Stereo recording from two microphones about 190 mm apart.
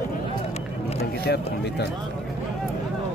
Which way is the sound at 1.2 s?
60° left (ahead or behind).